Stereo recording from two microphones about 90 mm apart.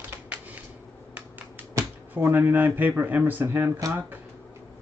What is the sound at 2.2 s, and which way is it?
A man's voice, 20° right (ahead or behind).